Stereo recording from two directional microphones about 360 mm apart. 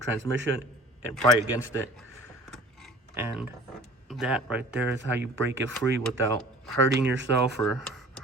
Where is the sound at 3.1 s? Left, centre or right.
Centre.